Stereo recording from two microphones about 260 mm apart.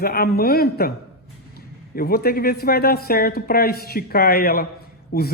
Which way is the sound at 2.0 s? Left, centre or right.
Left.